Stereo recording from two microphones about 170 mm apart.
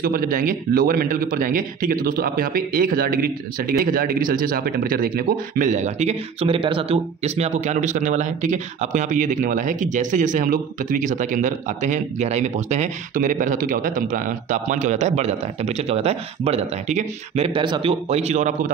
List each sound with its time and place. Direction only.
0.0 s speech: 55° right (ahead or behind)